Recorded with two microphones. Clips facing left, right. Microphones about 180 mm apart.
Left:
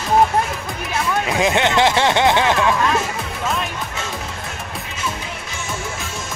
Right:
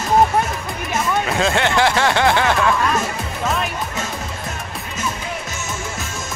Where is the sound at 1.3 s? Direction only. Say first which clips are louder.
Left 3 dB; 15° left (ahead or behind).